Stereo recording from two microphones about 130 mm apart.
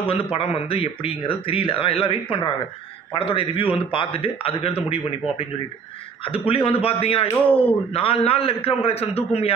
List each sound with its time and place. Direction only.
0.0 s speech: 45° left (ahead or behind)
6.2 s speech: 45° left (ahead or behind)